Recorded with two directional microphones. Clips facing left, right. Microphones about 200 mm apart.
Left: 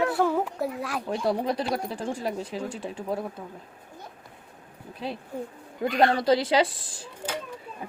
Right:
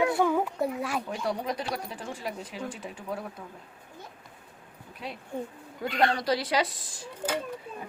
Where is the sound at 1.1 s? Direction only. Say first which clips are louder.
Left 5 dB; 30° left (ahead or behind).